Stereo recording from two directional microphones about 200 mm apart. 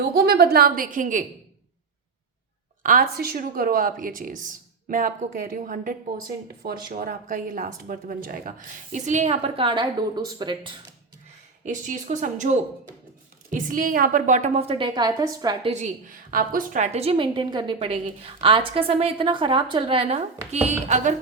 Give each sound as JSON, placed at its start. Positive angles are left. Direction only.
{"t": 0.1, "sound": "a woman's voice", "side_deg": -50}
{"t": 2.8, "sound": "a woman's voice", "side_deg": -45}
{"t": 11.6, "sound": "speech", "side_deg": -40}
{"t": 15.7, "sound": "a woman's voice", "side_deg": -40}